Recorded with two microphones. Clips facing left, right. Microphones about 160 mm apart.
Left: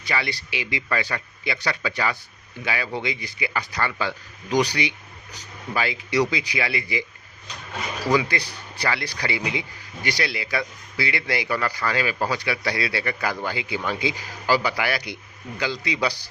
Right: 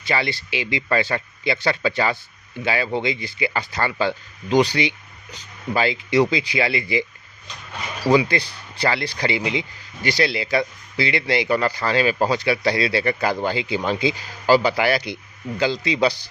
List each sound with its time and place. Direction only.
0.0 s speech: 25° right (ahead or behind)
8.3 s speech: 25° right (ahead or behind)